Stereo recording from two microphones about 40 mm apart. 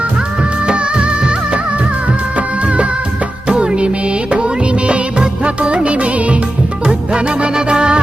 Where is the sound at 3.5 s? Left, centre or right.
Right.